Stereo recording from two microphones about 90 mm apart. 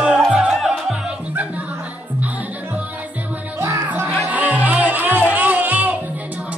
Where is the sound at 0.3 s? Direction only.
10° right (ahead or behind).